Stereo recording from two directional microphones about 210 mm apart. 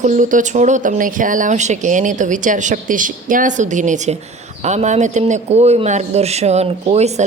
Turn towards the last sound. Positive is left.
turn(degrees=-30)  # may be behind; listen again after turning